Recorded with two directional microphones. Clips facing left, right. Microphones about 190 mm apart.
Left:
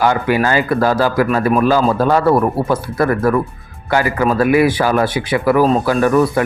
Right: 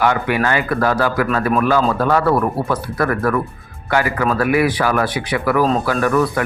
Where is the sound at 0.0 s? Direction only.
30° left (ahead or behind).